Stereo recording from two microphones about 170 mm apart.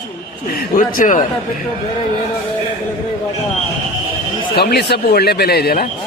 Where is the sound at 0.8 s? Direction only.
50° left (ahead or behind).